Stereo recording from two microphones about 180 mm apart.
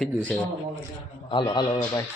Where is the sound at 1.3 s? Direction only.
25° left (ahead or behind).